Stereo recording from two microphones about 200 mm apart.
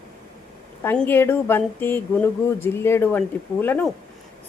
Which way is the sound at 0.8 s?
10° left (ahead or behind).